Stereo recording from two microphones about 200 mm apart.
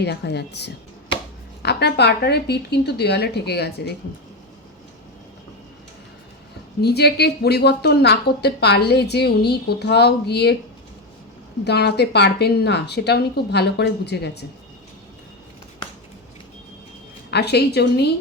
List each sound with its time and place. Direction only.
0.0 s speech: 55° left (ahead or behind)
6.8 s speech: 55° left (ahead or behind)
11.6 s speech: 55° left (ahead or behind)
17.3 s speech: 55° left (ahead or behind)